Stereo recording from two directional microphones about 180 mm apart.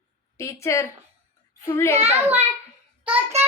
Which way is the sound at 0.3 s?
15° left (ahead or behind).